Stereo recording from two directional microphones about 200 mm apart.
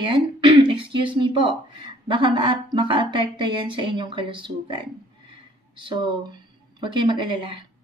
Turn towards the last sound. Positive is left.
turn(degrees=-25)  # may be behind; listen again after turning